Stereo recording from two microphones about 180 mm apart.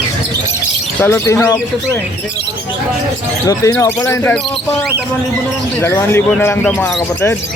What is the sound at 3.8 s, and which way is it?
Speech, 15° left (ahead or behind).